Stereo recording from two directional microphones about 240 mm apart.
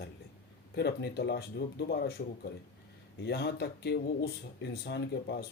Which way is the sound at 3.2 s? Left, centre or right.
Left.